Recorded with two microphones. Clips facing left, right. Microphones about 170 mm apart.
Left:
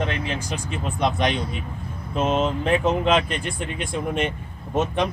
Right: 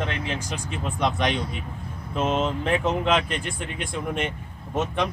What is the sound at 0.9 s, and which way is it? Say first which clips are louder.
Speech: left 2 dB; 15° left (ahead or behind).